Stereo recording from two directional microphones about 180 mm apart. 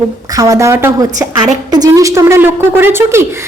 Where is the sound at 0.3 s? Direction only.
20° right (ahead or behind).